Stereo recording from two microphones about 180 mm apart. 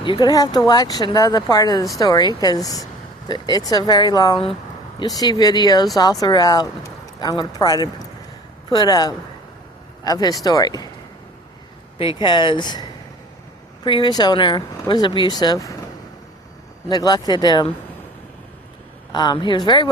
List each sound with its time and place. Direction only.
0.0 s speech: 25° left (ahead or behind)
11.9 s speech: 25° left (ahead or behind)
16.9 s speech: 20° left (ahead or behind)
19.1 s speech: 25° left (ahead or behind)